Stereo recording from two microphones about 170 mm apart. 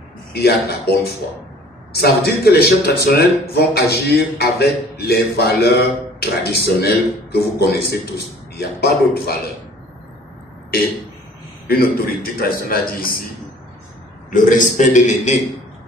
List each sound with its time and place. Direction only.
0.3 s a man's voice: 70° left (ahead or behind)
11.6 s a man's voice: 60° left (ahead or behind)
14.3 s a man's voice: 50° left (ahead or behind)